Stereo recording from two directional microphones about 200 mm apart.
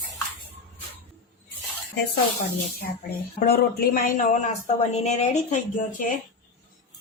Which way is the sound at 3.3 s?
50° left (ahead or behind).